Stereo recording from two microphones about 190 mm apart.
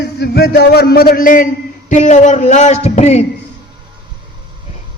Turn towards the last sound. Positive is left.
turn(degrees=35)  # may be behind; listen again after turning